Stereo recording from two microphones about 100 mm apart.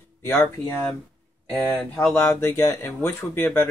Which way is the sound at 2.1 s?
25° left (ahead or behind).